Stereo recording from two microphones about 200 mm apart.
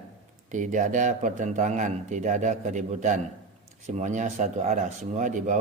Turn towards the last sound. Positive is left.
turn(degrees=-40)  # may be behind; listen again after turning